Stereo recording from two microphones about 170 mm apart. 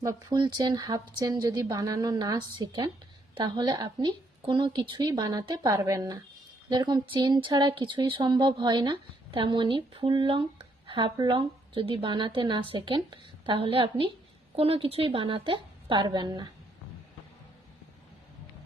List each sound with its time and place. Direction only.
0.0 s a woman's voice: 20° right (ahead or behind)